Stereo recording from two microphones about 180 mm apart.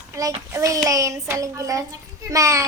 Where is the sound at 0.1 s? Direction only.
20° right (ahead or behind).